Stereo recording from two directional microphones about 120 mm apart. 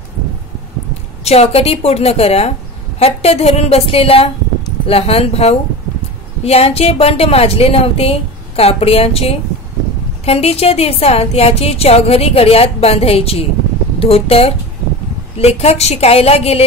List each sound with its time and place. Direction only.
1.2 s a woman's voice: 60° left (ahead or behind)